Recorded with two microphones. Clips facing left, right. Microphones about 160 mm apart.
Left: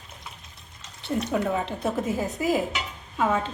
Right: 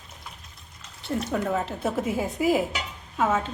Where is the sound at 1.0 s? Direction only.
Centre (ahead or behind).